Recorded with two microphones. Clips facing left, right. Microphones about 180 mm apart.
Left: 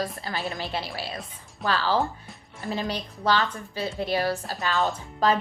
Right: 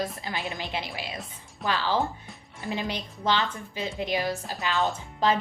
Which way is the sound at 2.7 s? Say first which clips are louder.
Left 2 dB; 20° right (ahead or behind).